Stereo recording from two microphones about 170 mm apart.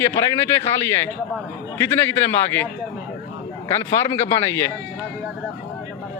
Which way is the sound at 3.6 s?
15° left (ahead or behind).